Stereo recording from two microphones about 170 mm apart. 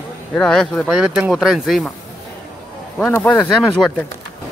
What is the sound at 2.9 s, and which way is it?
Speech, 10° left (ahead or behind).